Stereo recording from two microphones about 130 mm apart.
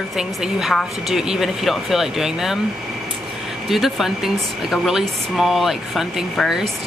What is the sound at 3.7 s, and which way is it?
Speech, centre (ahead or behind).